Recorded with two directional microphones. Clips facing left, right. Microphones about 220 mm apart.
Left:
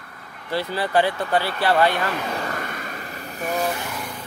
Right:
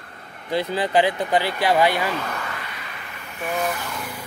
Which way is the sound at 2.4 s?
45° left (ahead or behind).